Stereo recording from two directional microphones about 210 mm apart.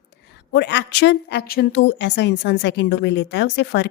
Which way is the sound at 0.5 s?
55° left (ahead or behind).